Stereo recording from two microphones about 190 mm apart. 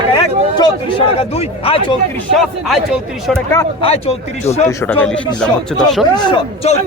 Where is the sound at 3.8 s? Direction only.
30° left (ahead or behind).